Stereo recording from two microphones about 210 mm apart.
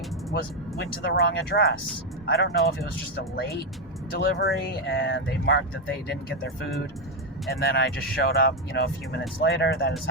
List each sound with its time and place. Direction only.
0.3 s speech: 50° left (ahead or behind)
7.5 s speech: 50° left (ahead or behind)